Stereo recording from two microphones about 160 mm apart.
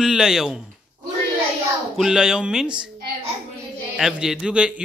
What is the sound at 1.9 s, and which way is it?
Speech, 5° right (ahead or behind).